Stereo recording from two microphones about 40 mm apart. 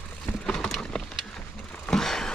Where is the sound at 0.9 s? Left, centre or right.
Centre.